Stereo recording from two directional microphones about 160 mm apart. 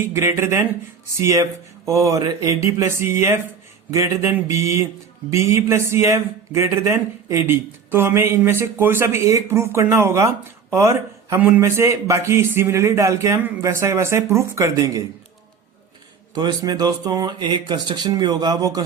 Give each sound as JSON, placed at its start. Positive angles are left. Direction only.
{"t": 0.0, "sound": "speech", "side_deg": -15}
{"t": 16.3, "sound": "speech", "side_deg": -25}